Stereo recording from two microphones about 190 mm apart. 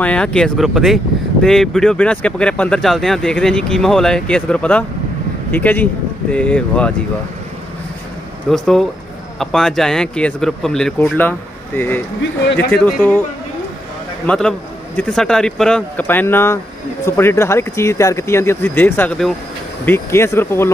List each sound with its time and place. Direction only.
0.0 s speech: 5° left (ahead or behind)
8.5 s speech: centre (ahead or behind)
14.2 s speech: 5° left (ahead or behind)